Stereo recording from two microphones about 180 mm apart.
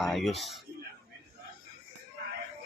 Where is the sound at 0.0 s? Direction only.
Centre (ahead or behind).